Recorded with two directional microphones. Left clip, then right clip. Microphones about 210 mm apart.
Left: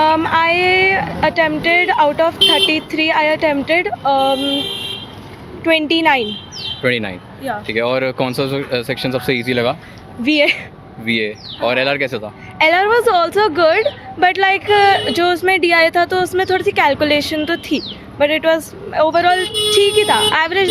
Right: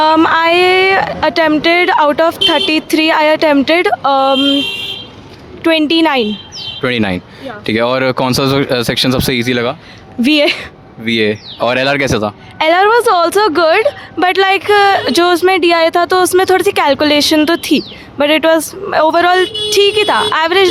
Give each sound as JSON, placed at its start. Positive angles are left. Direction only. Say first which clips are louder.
{"t": 0.0, "sound": "speech", "louder": "right 4 dB", "side_deg": -50}
{"t": 5.6, "sound": "speech", "louder": "right 3 dB", "side_deg": -45}
{"t": 6.8, "sound": "speech", "louder": "right 3 dB", "side_deg": -55}
{"t": 10.2, "sound": "speech", "louder": "right 3 dB", "side_deg": -45}
{"t": 12.5, "sound": "speech", "louder": "right 3 dB", "side_deg": -45}